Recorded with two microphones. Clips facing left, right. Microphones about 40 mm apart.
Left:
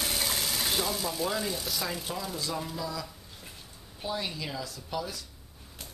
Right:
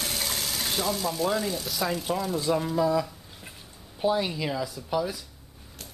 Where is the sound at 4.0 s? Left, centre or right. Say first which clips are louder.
Right 9 dB; centre.